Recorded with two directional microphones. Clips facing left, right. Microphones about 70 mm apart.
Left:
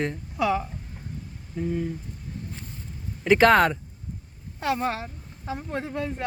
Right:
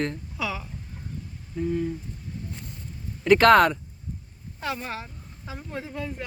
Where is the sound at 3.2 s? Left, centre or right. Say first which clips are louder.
Right 1 dB; centre.